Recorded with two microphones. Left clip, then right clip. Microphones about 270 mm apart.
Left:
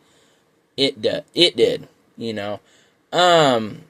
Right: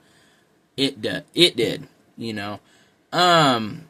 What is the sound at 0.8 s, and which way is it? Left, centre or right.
Speech, centre.